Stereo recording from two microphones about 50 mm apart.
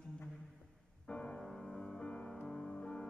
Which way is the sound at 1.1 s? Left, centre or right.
Centre.